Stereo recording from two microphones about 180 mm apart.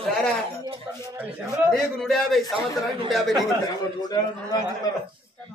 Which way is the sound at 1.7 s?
Centre (ahead or behind).